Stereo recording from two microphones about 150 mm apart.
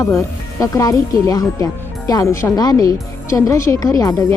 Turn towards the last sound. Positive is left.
turn(degrees=25)  # may be behind; listen again after turning